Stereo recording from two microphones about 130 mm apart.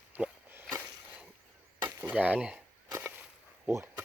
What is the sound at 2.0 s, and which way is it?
Speech, 15° right (ahead or behind).